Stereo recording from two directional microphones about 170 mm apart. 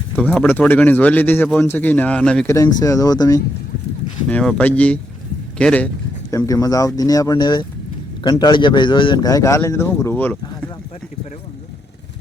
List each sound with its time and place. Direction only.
0.4 s a man's voice: 10° left (ahead or behind)
2.6 s a man's voice: 20° left (ahead or behind)
4.3 s a man's voice: 5° left (ahead or behind)
6.3 s a man's voice: 20° left (ahead or behind)